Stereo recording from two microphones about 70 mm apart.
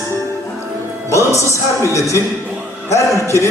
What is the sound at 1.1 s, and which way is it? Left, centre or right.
Music, left.